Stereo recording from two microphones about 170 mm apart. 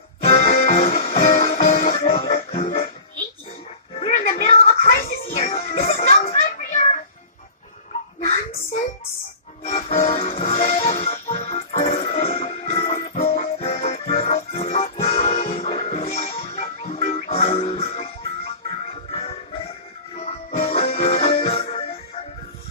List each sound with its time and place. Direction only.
0.2 s music: 40° left (ahead or behind)
4.0 s music: 45° left (ahead or behind)
5.7 s music: 40° left (ahead or behind)
9.6 s music: 40° left (ahead or behind)
12.8 s music: 50° left (ahead or behind)
13.2 s music: 40° left (ahead or behind)
19.1 s music: 35° left (ahead or behind)